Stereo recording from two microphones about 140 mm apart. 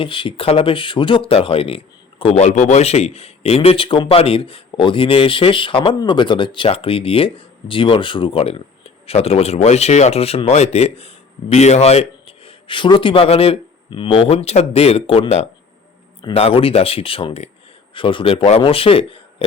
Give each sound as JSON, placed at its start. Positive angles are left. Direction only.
{"t": 0.0, "sound": "a man's voice", "side_deg": 40}